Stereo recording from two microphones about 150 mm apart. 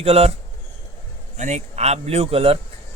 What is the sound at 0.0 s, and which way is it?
Speech, 45° right (ahead or behind).